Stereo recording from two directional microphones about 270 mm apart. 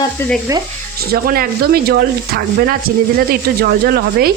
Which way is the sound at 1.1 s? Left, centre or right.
Right.